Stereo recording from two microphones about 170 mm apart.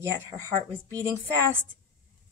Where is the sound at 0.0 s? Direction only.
15° right (ahead or behind).